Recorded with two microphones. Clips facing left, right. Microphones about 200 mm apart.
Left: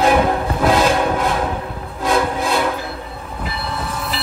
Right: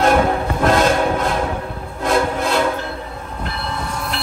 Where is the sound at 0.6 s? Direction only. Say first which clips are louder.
Even; centre (ahead or behind).